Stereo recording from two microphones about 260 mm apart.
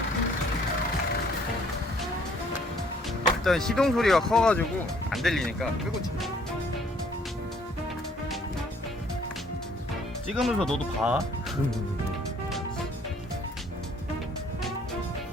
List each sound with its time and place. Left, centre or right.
3.4 s speech: centre
10.3 s speech: centre